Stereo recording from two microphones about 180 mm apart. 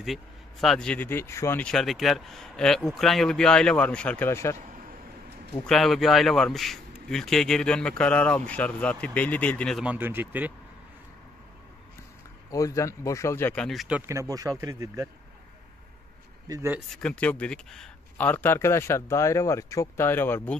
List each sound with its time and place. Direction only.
0.0 s a man's voice: centre (ahead or behind)
5.7 s a man's voice: centre (ahead or behind)
12.4 s speech: 20° left (ahead or behind); by 15.0 s 15° right (ahead or behind)
16.4 s speech: 15° right (ahead or behind)
16.9 s speech: 5° left (ahead or behind)